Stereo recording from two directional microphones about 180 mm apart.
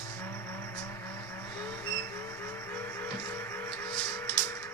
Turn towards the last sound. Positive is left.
turn(degrees=15)  # may be behind; listen again after turning